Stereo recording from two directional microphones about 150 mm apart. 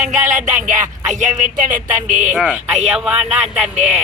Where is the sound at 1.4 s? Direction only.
60° right (ahead or behind).